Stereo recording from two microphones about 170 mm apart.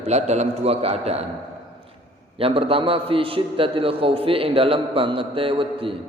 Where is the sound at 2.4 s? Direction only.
35° right (ahead or behind).